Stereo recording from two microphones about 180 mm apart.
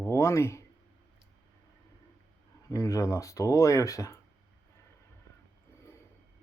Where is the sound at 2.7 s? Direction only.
20° left (ahead or behind).